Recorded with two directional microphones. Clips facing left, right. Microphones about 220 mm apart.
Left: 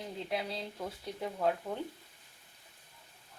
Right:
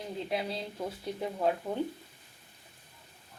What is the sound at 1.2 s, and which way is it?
Speech, 15° right (ahead or behind).